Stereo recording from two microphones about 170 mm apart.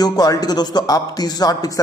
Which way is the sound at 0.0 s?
25° left (ahead or behind).